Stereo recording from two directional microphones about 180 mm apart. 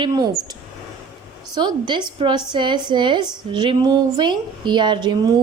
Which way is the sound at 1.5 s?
25° right (ahead or behind).